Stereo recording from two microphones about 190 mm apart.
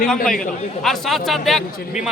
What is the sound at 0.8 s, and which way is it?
A man's voice, centre (ahead or behind).